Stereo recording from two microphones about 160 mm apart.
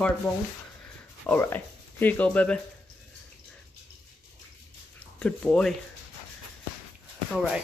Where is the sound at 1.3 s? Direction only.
10° left (ahead or behind).